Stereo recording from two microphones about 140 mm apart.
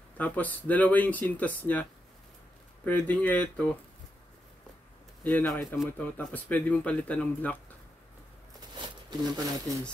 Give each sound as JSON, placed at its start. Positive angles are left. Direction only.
{"t": 0.2, "sound": "speech", "side_deg": 10}
{"t": 5.2, "sound": "speech", "side_deg": 5}
{"t": 8.7, "sound": "speech", "side_deg": -30}